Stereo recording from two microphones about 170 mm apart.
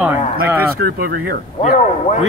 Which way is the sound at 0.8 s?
60° right (ahead or behind).